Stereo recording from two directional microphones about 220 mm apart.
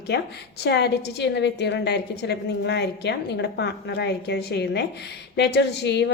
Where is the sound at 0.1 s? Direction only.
50° left (ahead or behind).